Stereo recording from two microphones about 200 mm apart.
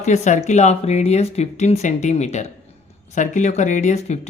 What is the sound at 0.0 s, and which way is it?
A woman's voice, 35° left (ahead or behind).